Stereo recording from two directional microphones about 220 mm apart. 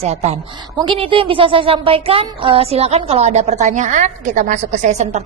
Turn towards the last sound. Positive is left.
turn(degrees=-30)  # may be behind; listen again after turning